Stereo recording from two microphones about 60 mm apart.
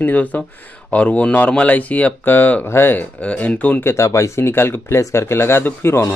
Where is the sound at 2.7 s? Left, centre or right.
Left.